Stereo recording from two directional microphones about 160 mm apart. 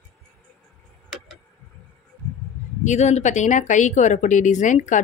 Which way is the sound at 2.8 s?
45° left (ahead or behind).